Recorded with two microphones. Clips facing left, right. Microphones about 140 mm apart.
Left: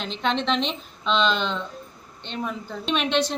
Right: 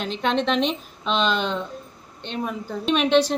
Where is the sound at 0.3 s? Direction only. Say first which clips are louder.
Right 2 dB; 5° right (ahead or behind).